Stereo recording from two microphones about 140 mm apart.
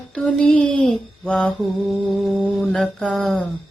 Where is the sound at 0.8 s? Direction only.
5° left (ahead or behind).